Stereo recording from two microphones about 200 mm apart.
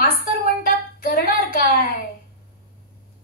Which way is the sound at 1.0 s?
45° left (ahead or behind).